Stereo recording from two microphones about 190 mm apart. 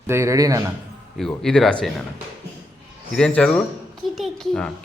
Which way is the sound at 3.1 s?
5° left (ahead or behind).